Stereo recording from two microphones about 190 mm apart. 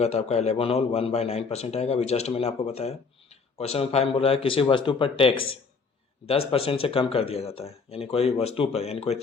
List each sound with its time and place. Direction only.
0.0 s a man's voice: 35° left (ahead or behind)